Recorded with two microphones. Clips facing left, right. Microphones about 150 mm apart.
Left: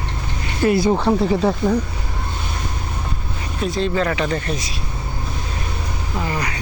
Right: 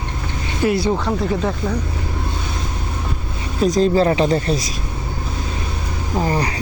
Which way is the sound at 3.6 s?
40° right (ahead or behind).